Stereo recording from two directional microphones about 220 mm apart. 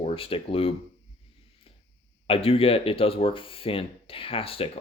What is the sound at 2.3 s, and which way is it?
Speech, 25° left (ahead or behind).